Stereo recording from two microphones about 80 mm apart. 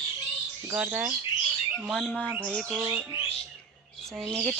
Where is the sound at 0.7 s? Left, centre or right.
Centre.